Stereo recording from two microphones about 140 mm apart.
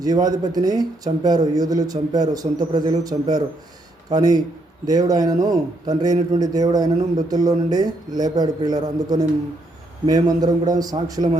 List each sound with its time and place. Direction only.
0.0 s a man's voice: 25° right (ahead or behind)